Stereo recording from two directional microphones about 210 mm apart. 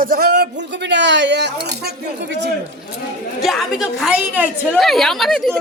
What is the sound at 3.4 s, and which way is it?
A woman's voice, centre (ahead or behind).